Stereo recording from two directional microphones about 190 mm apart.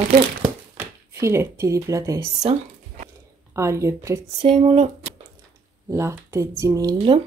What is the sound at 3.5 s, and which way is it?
Speech, 15° right (ahead or behind).